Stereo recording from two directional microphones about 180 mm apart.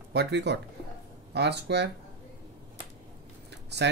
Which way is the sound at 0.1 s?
70° right (ahead or behind).